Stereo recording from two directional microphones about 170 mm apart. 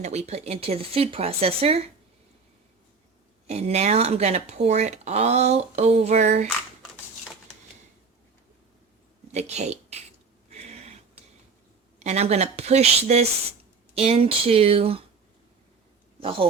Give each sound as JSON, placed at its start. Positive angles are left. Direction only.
{"t": 0.0, "sound": "speech", "side_deg": -40}
{"t": 3.4, "sound": "speech", "side_deg": -40}
{"t": 9.3, "sound": "speech", "side_deg": -40}
{"t": 10.5, "sound": "a sound", "side_deg": -40}
{"t": 11.9, "sound": "speech", "side_deg": -40}
{"t": 16.2, "sound": "speech", "side_deg": -30}